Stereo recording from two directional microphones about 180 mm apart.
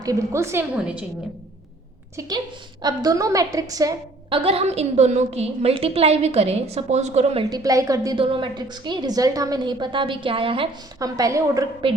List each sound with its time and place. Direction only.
0.0 s a woman's voice: 15° right (ahead or behind)
2.1 s a woman's voice: 20° right (ahead or behind)
4.4 s a woman's voice: 35° right (ahead or behind)
7.5 s a woman's voice: 20° right (ahead or behind)
11.0 s a woman's voice: 15° right (ahead or behind)
11.8 s a woman's voice: 30° right (ahead or behind)